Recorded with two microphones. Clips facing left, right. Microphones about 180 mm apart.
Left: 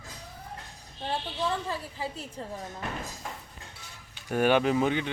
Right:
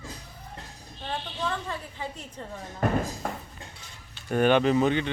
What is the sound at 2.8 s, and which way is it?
Speech, 50° right (ahead or behind).